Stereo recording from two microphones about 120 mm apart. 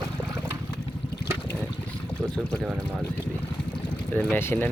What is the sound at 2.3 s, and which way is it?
Speech, 5° right (ahead or behind).